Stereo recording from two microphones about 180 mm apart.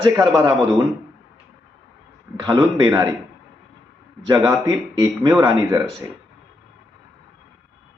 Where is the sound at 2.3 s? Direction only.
25° right (ahead or behind).